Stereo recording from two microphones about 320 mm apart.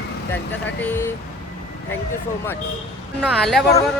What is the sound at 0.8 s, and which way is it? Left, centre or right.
Speech, centre.